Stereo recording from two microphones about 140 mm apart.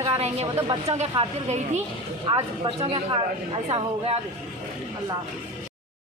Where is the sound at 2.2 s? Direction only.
35° right (ahead or behind).